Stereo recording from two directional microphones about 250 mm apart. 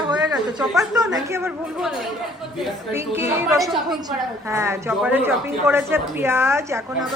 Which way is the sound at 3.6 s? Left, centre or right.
Centre.